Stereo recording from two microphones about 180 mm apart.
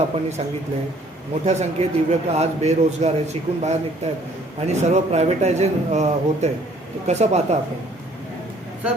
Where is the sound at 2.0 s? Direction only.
35° right (ahead or behind).